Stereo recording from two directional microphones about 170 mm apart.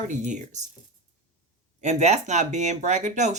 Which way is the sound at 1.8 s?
45° right (ahead or behind).